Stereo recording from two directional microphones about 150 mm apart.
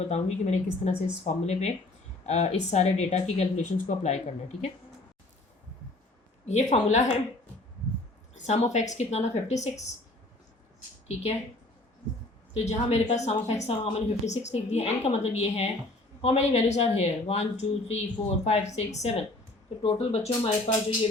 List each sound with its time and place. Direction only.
0.0 s a woman's voice: 45° left (ahead or behind)
6.4 s a woman's voice: 50° left (ahead or behind)
8.4 s a woman's voice: 50° left (ahead or behind)
12.5 s a woman's voice: 45° left (ahead or behind)